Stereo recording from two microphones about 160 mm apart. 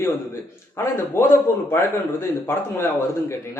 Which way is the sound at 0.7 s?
20° left (ahead or behind).